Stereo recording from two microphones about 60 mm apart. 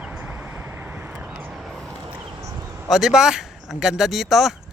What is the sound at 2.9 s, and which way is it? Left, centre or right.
A man's voice, centre.